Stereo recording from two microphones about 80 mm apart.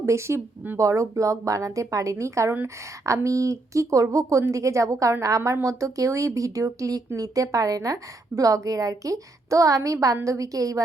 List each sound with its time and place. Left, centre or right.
0.0 s speech: right
0.8 s speech: right